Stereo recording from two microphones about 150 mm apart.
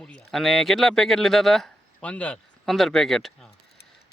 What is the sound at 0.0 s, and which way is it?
Speech, 5° left (ahead or behind).